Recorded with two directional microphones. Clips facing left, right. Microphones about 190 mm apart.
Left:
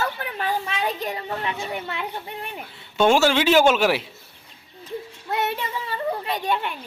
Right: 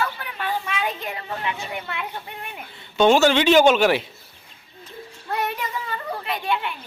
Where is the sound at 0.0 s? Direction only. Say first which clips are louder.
Left 1 dB; 40° left (ahead or behind).